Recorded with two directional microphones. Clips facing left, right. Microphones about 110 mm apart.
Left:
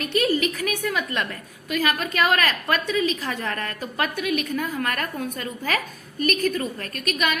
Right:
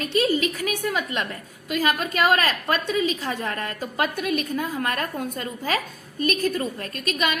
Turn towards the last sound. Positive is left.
turn(degrees=-30)  # may be behind; listen again after turning